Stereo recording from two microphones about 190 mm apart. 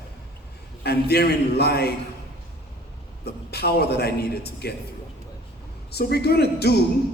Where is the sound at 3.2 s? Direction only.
55° left (ahead or behind).